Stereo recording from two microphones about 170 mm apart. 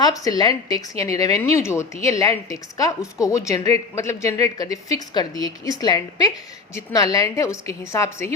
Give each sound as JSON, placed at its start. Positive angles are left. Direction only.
{"t": 0.0, "sound": "speech", "side_deg": 20}